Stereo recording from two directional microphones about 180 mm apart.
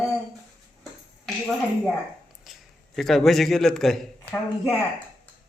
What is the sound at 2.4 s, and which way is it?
A man's voice, centre (ahead or behind).